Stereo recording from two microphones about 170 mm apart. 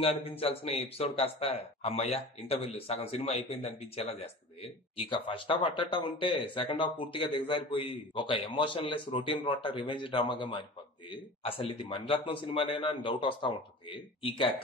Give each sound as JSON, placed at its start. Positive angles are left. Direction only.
{"t": 0.0, "sound": "speech", "side_deg": 35}